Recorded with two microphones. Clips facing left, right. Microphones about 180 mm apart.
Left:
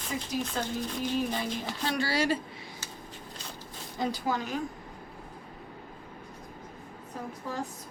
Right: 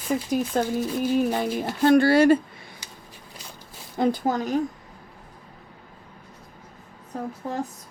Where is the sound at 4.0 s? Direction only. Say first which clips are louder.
Right 8 dB; 50° right (ahead or behind).